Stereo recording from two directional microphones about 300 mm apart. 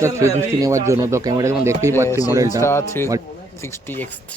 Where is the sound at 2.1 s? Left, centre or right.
Centre.